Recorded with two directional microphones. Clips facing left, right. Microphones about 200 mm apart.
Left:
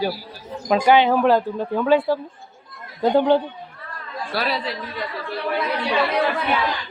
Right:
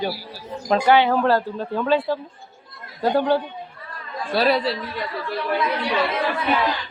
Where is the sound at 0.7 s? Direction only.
15° left (ahead or behind).